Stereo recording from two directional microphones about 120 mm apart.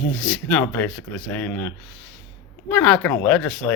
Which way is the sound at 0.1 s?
5° left (ahead or behind).